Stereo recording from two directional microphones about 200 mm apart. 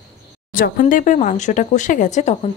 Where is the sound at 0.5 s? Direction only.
45° left (ahead or behind).